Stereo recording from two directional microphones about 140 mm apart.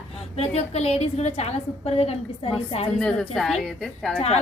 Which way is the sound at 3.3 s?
5° left (ahead or behind).